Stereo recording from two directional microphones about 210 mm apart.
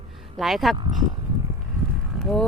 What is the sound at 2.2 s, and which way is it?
Vehicle, 5° left (ahead or behind).